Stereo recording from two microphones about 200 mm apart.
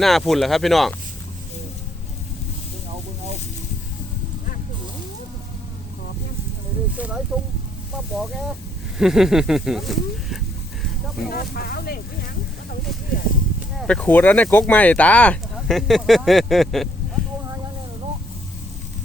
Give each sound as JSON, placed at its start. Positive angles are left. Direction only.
{"t": 0.0, "sound": "speech", "side_deg": 0}
{"t": 6.9, "sound": "speech", "side_deg": -5}
{"t": 11.3, "sound": "speech", "side_deg": 50}
{"t": 13.7, "sound": "speech", "side_deg": 5}